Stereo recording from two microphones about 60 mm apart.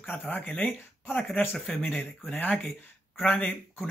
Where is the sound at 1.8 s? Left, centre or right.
Left.